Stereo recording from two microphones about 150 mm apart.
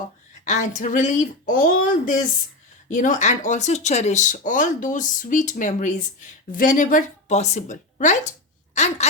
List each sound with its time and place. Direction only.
0.4 s a woman's voice: 55° left (ahead or behind)